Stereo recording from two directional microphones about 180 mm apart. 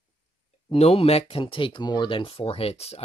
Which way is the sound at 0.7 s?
35° left (ahead or behind).